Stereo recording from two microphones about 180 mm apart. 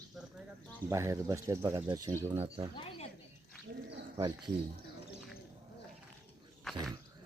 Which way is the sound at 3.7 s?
90° right.